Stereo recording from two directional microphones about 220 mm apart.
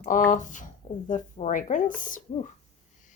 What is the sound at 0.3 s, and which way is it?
Speech, 35° left (ahead or behind).